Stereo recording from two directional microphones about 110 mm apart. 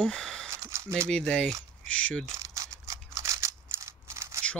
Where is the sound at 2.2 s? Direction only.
30° right (ahead or behind).